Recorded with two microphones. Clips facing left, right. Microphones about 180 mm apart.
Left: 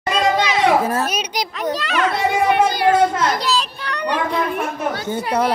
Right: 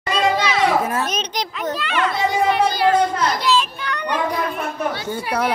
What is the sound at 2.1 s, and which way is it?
Children playing, 60° left (ahead or behind).